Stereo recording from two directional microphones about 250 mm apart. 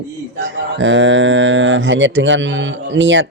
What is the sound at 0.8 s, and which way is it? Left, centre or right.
A man's voice, right.